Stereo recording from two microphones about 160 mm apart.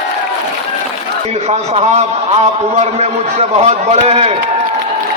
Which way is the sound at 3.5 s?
45° right (ahead or behind).